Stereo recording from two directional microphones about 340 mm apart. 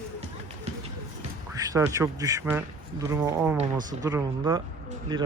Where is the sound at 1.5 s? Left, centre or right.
Centre.